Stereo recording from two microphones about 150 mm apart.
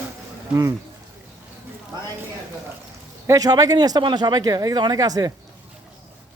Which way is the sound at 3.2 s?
25° right (ahead or behind).